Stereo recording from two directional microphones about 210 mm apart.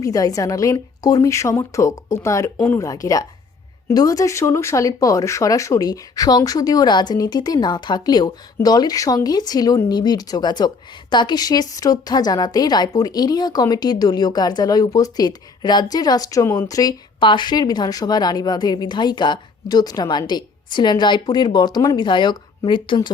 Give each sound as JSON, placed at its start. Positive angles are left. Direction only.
{"t": 0.0, "sound": "a woman's voice", "side_deg": 15}